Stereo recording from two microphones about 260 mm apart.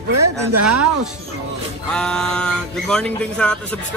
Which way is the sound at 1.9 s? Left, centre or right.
Centre.